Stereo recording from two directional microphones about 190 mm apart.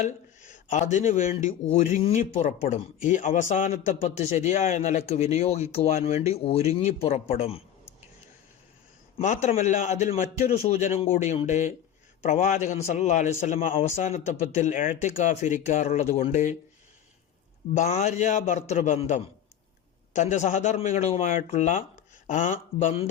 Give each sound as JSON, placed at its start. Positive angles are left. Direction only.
{"t": 0.5, "sound": "a man's voice", "side_deg": 40}
{"t": 9.1, "sound": "speech", "side_deg": 40}
{"t": 17.7, "sound": "speech", "side_deg": 40}